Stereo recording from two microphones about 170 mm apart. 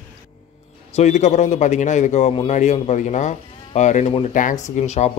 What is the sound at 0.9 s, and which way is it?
A man's voice, 45° left (ahead or behind).